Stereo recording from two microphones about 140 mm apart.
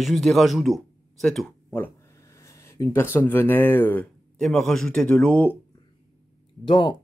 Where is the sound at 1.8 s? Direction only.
20° left (ahead or behind).